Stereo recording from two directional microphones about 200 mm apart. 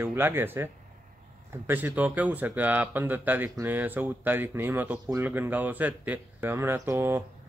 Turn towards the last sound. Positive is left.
turn(degrees=-10)  # may be behind; listen again after turning